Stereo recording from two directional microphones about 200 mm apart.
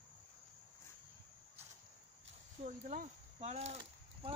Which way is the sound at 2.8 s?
35° right (ahead or behind).